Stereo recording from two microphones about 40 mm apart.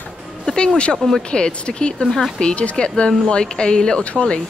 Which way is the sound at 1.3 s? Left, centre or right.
Left.